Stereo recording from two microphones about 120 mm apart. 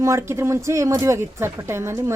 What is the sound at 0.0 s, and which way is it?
Speech, 25° right (ahead or behind).